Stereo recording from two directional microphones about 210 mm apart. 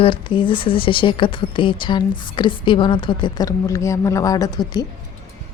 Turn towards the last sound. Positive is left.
turn(degrees=20)  # may be behind; listen again after turning